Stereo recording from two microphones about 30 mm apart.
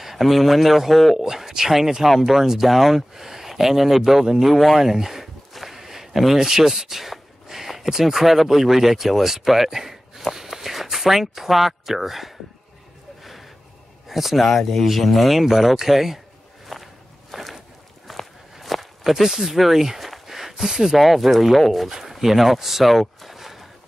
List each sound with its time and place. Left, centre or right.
0.0 s speech: centre
1.2 s speech: centre
4.5 s walk: centre
5.8 s a sound: centre
6.4 s speech: centre
13.2 s a sound: centre
14.0 s a man's voice: centre
16.6 s walk: centre
19.3 s speech: centre
20.2 s a sound: centre
21.0 s speech: centre